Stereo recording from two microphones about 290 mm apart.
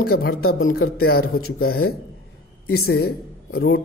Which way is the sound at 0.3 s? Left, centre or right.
Left.